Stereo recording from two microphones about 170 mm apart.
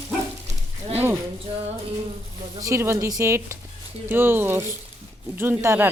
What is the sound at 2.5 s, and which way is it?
A woman's voice, 20° right (ahead or behind).